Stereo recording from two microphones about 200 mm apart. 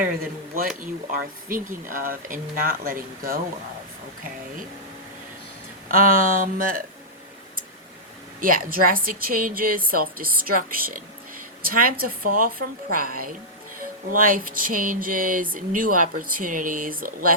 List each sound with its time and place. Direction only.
1.1 s a woman's voice: 45° right (ahead or behind)
5.9 s a woman's voice: 45° right (ahead or behind)
8.4 s a woman's voice: 45° right (ahead or behind)